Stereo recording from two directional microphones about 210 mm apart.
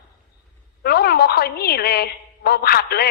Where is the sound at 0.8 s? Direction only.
45° left (ahead or behind).